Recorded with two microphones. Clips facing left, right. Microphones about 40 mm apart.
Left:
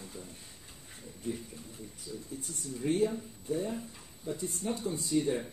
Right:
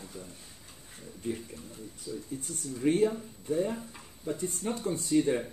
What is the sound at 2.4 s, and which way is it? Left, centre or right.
Speech, right.